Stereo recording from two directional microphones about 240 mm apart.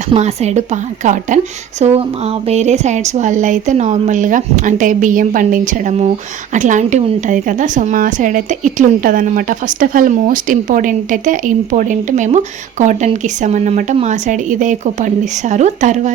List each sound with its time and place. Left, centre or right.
0.1 s a woman's voice: right